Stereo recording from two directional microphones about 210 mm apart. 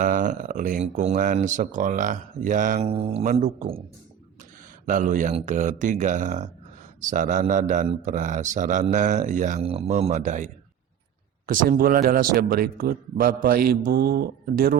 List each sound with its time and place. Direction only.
0.0 s speech: 40° right (ahead or behind)
4.9 s a man's voice: 40° right (ahead or behind)